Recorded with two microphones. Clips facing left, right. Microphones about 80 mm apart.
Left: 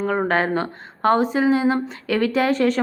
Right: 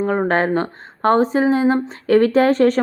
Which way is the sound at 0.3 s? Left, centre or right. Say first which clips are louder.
Right 3 dB; right.